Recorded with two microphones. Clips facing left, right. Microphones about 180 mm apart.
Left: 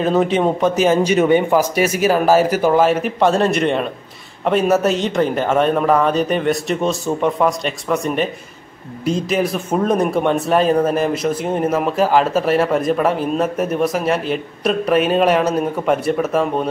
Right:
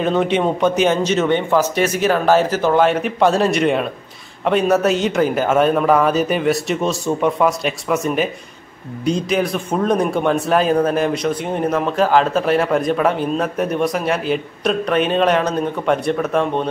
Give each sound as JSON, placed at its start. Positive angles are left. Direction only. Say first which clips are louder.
{"t": 0.0, "sound": "speech", "louder": "left 1 dB", "side_deg": 0}